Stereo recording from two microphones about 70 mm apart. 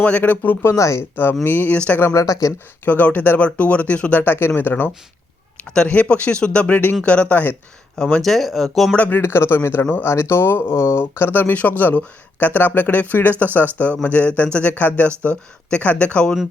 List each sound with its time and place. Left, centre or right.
0.0 s speech: left
0.6 s speech: left
1.1 s speech: left
2.0 s speech: left
2.2 s speech: left
2.8 s speech: left
4.2 s speech: left
5.6 s speech: centre
8.2 s speech: centre
9.0 s speech: left